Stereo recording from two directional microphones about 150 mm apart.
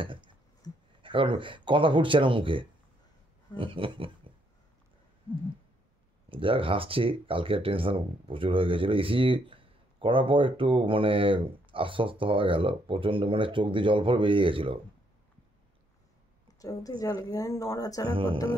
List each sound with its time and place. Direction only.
0.0 s a sound: 35° right (ahead or behind)
0.6 s a sound: 25° left (ahead or behind)
1.0 s speech: 35° right (ahead or behind)
6.2 s speech: 35° right (ahead or behind)
16.5 s a woman's voice: 25° left (ahead or behind)
18.0 s speech: 35° right (ahead or behind)